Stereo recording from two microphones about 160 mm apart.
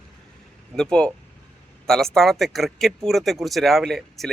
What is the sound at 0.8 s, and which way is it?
A man's voice, 5° left (ahead or behind).